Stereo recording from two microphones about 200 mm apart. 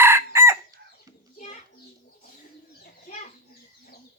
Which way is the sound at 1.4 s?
35° left (ahead or behind).